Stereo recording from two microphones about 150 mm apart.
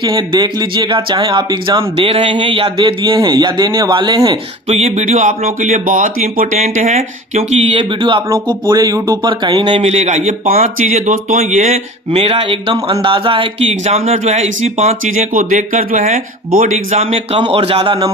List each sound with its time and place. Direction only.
0.0 s speech: 30° right (ahead or behind)
4.7 s speech: 45° right (ahead or behind)
9.8 s speech: 45° right (ahead or behind)
12.1 s speech: 40° right (ahead or behind)
15.1 s speech: 60° right (ahead or behind); by 18.0 s 40° right (ahead or behind)